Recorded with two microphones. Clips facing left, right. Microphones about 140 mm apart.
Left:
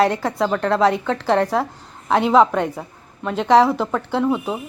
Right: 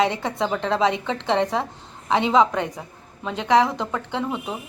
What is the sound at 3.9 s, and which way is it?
Speech, 10° left (ahead or behind).